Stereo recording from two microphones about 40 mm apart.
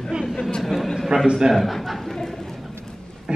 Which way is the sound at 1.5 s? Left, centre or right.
Centre.